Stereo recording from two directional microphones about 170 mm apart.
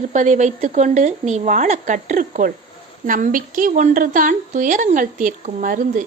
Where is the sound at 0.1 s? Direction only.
45° right (ahead or behind).